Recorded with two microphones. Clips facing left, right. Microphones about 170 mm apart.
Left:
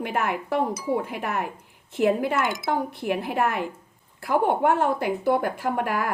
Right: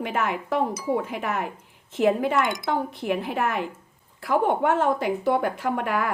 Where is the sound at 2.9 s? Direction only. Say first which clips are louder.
Even; 55° left (ahead or behind).